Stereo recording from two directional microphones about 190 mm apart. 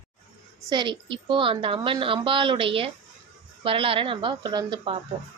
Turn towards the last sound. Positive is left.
turn(degrees=-25)  # may be behind; listen again after turning